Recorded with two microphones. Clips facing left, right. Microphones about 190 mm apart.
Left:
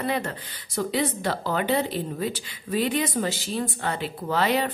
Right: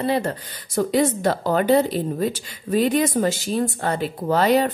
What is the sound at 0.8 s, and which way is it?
A woman's voice, 45° right (ahead or behind).